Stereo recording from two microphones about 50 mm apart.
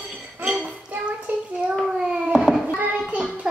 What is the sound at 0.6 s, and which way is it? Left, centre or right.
Dishes, right.